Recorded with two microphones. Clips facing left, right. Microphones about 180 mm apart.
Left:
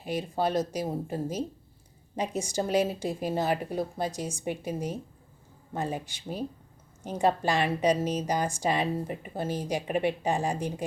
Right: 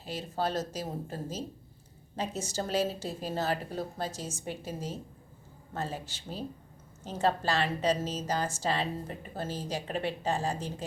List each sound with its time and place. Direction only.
0.0 s a woman's voice: 15° left (ahead or behind)